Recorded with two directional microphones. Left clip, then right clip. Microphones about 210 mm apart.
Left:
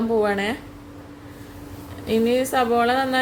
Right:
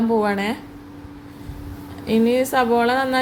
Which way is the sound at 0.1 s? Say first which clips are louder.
Left 1 dB; 5° right (ahead or behind).